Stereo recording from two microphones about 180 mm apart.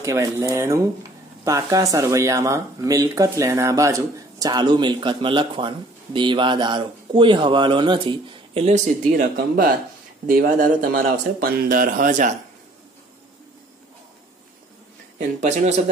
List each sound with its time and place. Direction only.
0.0 s speech: 15° right (ahead or behind); by 12.3 s 50° right (ahead or behind)
15.1 s speech: 40° right (ahead or behind)